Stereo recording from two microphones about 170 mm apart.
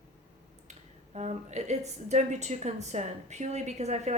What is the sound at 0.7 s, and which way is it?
A woman's voice, 40° right (ahead or behind).